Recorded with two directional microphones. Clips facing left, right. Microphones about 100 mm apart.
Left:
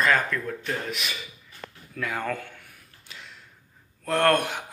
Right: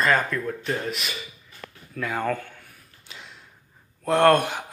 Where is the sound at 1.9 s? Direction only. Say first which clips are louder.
Right 3 dB; 5° right (ahead or behind).